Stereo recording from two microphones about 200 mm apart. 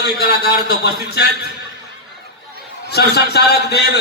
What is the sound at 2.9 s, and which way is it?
Speech, 55° left (ahead or behind).